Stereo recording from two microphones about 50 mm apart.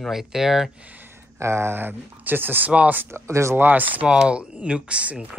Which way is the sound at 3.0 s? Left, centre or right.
Right.